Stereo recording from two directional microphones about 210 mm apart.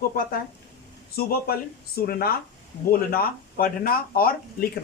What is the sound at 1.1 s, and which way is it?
Speech, 45° left (ahead or behind).